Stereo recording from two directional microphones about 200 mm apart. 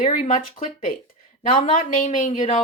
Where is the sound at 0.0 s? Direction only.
35° left (ahead or behind).